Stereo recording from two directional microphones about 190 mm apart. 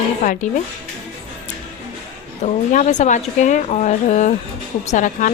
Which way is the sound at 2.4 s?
40° left (ahead or behind).